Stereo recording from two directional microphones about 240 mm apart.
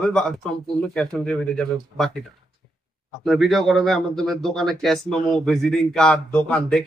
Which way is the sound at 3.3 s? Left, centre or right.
Centre.